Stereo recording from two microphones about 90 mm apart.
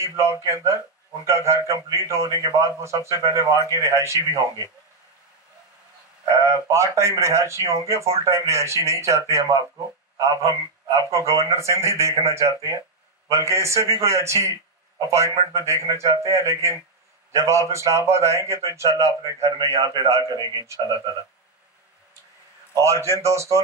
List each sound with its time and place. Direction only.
1.2 s a man's voice: 35° right (ahead or behind)
6.2 s a man's voice: 35° right (ahead or behind)
22.8 s a man's voice: 35° right (ahead or behind)